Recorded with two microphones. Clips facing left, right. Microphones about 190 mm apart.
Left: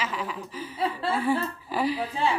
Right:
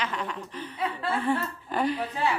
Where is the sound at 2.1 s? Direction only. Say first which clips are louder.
Left 1 dB; 30° left (ahead or behind).